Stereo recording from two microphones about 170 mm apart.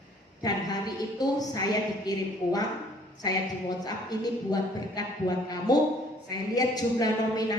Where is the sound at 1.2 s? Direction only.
20° left (ahead or behind).